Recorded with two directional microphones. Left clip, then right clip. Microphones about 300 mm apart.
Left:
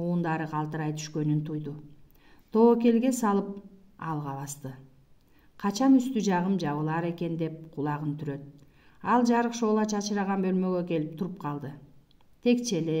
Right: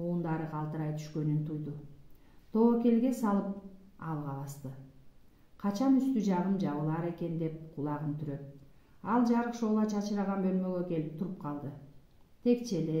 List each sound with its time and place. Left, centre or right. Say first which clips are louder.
0.0 s a woman's voice: left 5 dB; left
2.5 s a woman's voice: left 6 dB; left
5.6 s a woman's voice: left 6 dB; left